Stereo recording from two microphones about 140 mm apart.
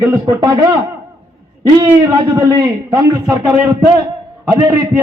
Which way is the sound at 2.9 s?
20° right (ahead or behind).